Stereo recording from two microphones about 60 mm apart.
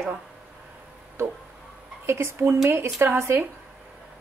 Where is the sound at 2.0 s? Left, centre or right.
Right.